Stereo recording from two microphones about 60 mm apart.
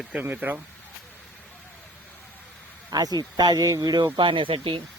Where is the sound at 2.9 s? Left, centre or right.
Right.